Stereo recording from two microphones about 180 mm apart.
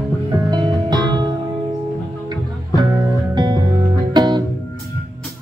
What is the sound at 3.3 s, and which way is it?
Music, 25° right (ahead or behind).